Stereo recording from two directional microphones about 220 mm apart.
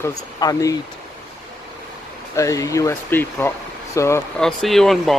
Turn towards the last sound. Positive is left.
turn(degrees=0)  # may be behind; listen again after turning